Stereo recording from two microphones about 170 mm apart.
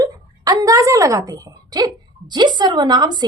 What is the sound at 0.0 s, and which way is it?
A woman's voice, 20° right (ahead or behind).